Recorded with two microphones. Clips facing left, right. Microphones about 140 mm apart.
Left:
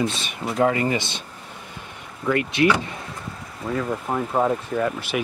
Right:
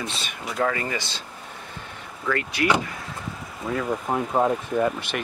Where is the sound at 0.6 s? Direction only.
25° left (ahead or behind).